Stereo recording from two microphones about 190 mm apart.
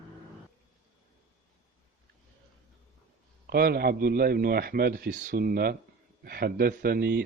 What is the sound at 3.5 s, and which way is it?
Speech, 50° right (ahead or behind).